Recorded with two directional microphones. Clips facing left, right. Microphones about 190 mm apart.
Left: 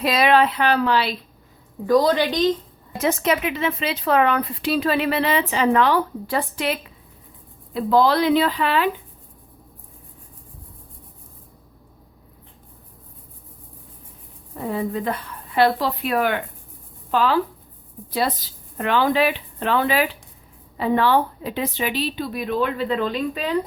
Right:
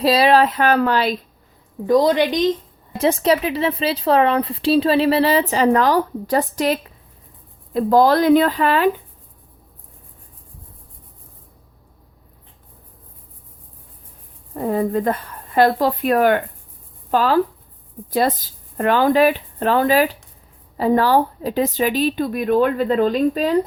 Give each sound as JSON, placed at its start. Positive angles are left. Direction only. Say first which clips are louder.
{"t": 0.0, "sound": "a woman's voice", "louder": "right 3 dB", "side_deg": -30}
{"t": 1.9, "sound": "a woman's voice", "louder": "right 2 dB", "side_deg": -20}
{"t": 3.0, "sound": "a woman's voice", "louder": "right 4 dB", "side_deg": -30}
{"t": 14.5, "sound": "a woman's voice", "louder": "right 6 dB", "side_deg": -45}